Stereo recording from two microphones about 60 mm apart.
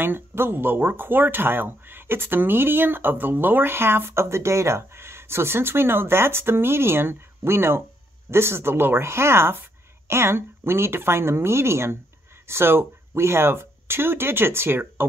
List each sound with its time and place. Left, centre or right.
0.0 s speech: right